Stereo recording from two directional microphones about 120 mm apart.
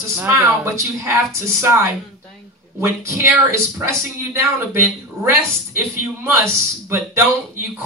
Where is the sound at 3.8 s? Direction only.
25° right (ahead or behind).